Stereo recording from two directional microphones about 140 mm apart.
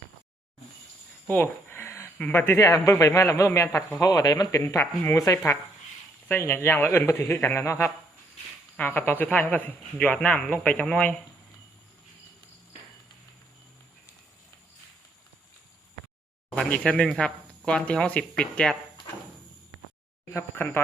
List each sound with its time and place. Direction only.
1.3 s a sound: 15° left (ahead or behind)
2.2 s a man's voice: 15° left (ahead or behind)
4.6 s a man's voice: 15° left (ahead or behind)
16.6 s speech: 10° left (ahead or behind)
20.3 s speech: 15° left (ahead or behind)